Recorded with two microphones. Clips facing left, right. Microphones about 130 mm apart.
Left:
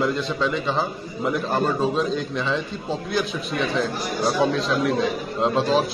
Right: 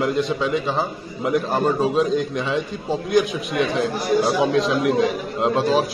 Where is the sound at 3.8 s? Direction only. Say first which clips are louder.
Right 5 dB; 5° right (ahead or behind).